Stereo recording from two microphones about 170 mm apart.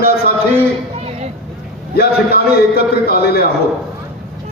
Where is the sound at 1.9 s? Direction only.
65° left (ahead or behind).